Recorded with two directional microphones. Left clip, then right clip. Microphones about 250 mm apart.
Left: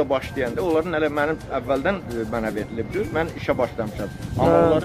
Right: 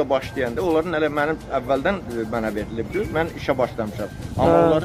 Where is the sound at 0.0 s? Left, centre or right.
Centre.